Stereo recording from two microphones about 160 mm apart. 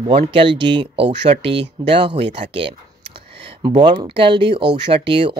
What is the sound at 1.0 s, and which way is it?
Speech, 90° right.